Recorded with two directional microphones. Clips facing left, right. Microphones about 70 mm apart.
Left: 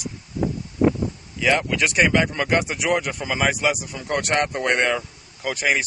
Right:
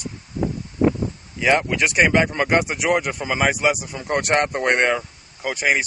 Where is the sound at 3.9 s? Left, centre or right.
Right.